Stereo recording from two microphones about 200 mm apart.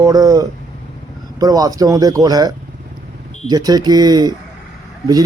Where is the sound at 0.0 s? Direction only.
20° right (ahead or behind).